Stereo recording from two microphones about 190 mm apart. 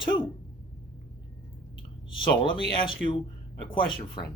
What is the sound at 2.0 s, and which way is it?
Speech, 25° left (ahead or behind).